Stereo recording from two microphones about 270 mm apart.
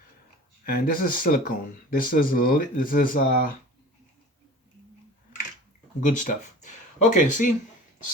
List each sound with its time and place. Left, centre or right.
0.6 s speech: left
6.1 s speech: left